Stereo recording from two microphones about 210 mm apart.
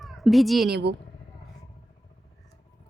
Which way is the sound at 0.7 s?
55° right (ahead or behind).